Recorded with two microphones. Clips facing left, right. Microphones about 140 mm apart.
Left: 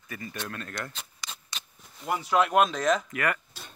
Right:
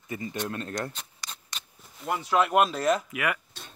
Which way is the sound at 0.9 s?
Centre (ahead or behind).